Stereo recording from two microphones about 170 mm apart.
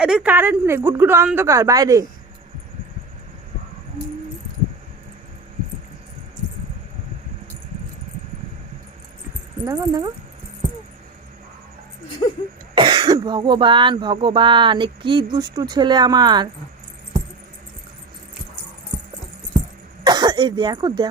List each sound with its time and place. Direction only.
0.0 s a woman's voice: 5° right (ahead or behind)
9.6 s speech: 20° right (ahead or behind)
12.7 s speech: 30° right (ahead or behind)
20.1 s speech: 25° right (ahead or behind)